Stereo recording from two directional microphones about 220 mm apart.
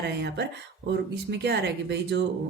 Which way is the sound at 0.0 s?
50° right (ahead or behind).